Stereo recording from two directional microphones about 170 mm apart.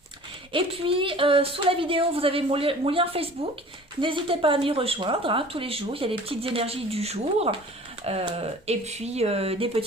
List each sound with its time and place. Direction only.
0.5 s speech: 35° right (ahead or behind)